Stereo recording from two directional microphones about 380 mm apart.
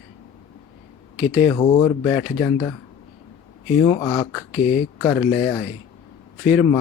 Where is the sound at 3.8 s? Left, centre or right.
Centre.